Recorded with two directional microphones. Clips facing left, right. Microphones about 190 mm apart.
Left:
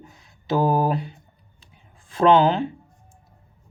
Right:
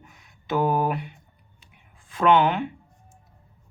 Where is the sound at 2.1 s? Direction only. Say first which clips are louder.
Left 3 dB; 30° left (ahead or behind).